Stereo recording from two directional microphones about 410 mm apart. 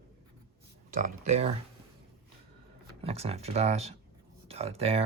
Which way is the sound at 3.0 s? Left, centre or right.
Centre.